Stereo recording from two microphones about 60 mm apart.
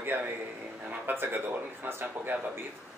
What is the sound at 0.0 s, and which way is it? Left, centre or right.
Speech, right.